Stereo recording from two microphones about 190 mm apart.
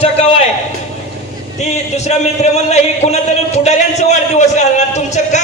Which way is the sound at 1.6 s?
35° left (ahead or behind).